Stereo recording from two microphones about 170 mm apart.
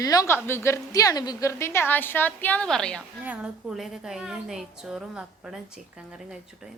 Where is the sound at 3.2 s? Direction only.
5° right (ahead or behind).